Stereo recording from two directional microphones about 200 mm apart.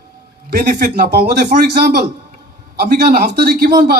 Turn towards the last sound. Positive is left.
turn(degrees=-50)  # may be behind; listen again after turning